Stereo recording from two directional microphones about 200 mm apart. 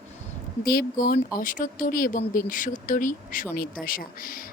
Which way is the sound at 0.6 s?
50° left (ahead or behind).